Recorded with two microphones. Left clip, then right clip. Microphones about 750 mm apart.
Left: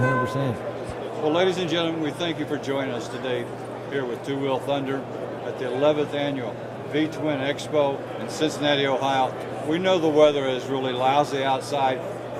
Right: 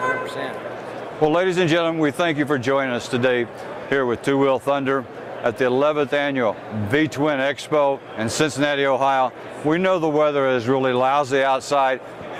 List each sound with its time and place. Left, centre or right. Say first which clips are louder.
1.3 s a man's voice: right 2 dB; right